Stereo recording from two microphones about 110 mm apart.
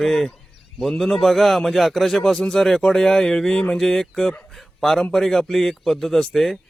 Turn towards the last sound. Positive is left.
turn(degrees=0)  # may be behind; listen again after turning